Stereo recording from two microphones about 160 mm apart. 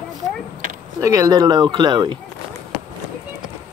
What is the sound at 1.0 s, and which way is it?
Speech, 20° right (ahead or behind).